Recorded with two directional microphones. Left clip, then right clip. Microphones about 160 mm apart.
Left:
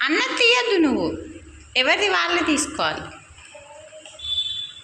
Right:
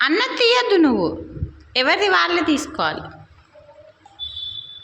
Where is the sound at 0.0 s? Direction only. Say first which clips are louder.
Right 1 dB; 30° right (ahead or behind).